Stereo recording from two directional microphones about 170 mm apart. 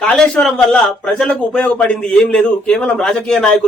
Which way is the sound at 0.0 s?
5° left (ahead or behind).